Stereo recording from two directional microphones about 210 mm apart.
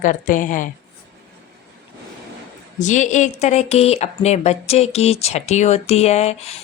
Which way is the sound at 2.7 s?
35° left (ahead or behind).